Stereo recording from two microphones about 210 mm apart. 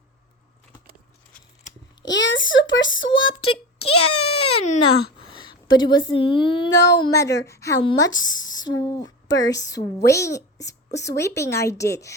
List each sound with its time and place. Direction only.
2.0 s speech: 60° left (ahead or behind)
3.2 s a child's voice: 80° left
5.3 s a sound: 20° left (ahead or behind)
6.1 s speech: 25° left (ahead or behind)
6.7 s speech: 55° left (ahead or behind)
7.0 s a woman's voice: 15° left (ahead or behind)
8.4 s a sound: 65° left (ahead or behind)
8.7 s speech: 15° left (ahead or behind)
9.2 s speech: 60° left (ahead or behind)
9.7 s a woman's voice: 15° left (ahead or behind)